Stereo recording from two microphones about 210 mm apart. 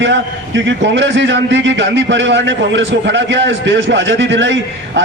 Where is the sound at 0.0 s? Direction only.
60° right (ahead or behind).